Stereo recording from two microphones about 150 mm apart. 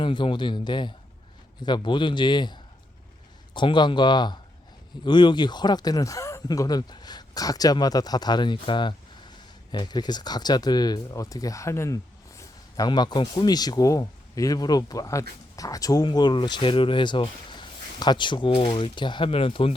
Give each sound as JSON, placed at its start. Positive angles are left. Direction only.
{"t": 0.0, "sound": "speech", "side_deg": 30}